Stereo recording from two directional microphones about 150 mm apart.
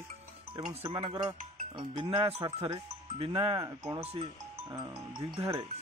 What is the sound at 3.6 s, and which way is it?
Speech, 20° right (ahead or behind).